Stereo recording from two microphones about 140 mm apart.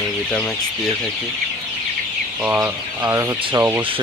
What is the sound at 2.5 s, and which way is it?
Speech, 15° right (ahead or behind).